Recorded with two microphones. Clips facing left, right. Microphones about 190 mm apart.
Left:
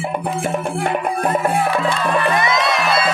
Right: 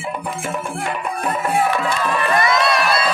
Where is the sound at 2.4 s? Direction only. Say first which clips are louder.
Right 1 dB; 20° left (ahead or behind).